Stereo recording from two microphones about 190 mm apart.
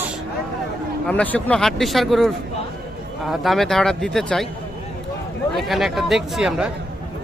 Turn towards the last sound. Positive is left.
turn(degrees=0)  # may be behind; listen again after turning